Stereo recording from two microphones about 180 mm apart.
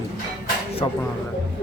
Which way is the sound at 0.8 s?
30° left (ahead or behind).